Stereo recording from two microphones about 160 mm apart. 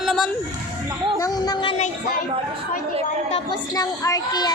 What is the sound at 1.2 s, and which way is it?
Speech, 25° left (ahead or behind).